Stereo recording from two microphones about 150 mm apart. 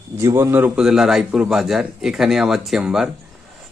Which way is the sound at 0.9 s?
5° right (ahead or behind).